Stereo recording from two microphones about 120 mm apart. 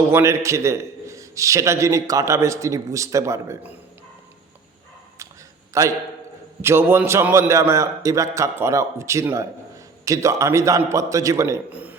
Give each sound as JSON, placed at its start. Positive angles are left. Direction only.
{"t": 0.1, "sound": "a man's voice", "side_deg": -20}
{"t": 5.7, "sound": "a man's voice", "side_deg": -25}
{"t": 11.7, "sound": "a sound", "side_deg": -15}